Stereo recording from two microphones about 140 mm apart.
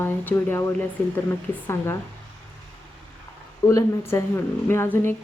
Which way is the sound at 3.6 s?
20° left (ahead or behind).